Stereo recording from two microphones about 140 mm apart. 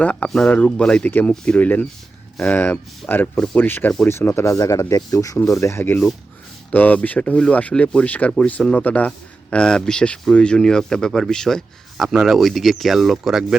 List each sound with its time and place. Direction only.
0.0 s speech: 10° left (ahead or behind)